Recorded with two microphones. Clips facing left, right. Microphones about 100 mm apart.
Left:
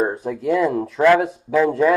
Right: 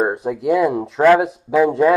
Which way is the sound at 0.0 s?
20° right (ahead or behind).